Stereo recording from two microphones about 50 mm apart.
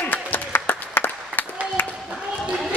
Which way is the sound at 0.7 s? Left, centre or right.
Left.